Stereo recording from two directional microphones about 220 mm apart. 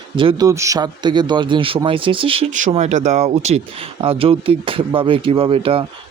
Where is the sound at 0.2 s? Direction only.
20° right (ahead or behind).